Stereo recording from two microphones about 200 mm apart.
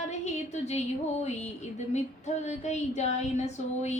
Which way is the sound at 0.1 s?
35° left (ahead or behind).